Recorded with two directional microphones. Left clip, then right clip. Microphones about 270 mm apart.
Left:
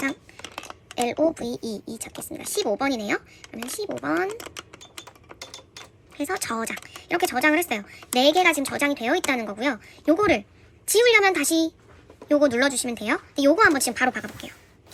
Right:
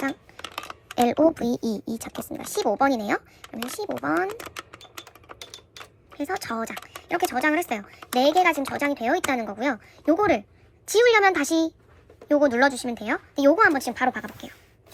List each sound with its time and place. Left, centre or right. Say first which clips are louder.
0.9 s speech: right 3 dB; centre
6.1 s speech: left 1 dB; centre